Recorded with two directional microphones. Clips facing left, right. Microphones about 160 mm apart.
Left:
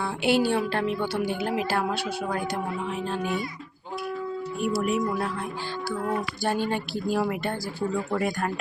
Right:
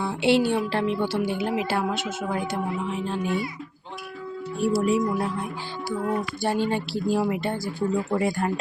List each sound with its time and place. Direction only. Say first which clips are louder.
0.0 s speech: right 2 dB; 25° right (ahead or behind)
4.6 s speech: right 4 dB; 30° right (ahead or behind)
6.4 s speech: right 2 dB; 25° right (ahead or behind)